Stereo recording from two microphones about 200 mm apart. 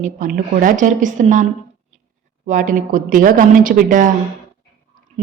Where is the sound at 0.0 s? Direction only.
45° right (ahead or behind).